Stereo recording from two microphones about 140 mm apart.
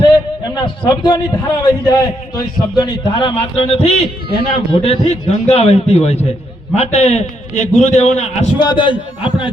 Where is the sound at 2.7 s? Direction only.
30° left (ahead or behind); by 8.4 s 55° left (ahead or behind).